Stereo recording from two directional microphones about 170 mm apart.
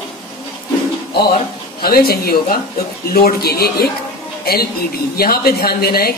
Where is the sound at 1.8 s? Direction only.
65° left (ahead or behind).